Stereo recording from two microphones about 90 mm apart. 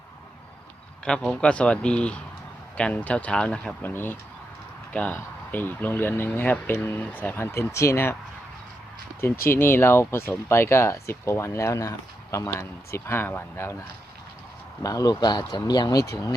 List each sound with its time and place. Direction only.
1.0 s speech: 10° left (ahead or behind)
3.8 s speech: 25° left (ahead or behind)
9.2 s speech: 25° left (ahead or behind)
14.8 s speech: 40° left (ahead or behind)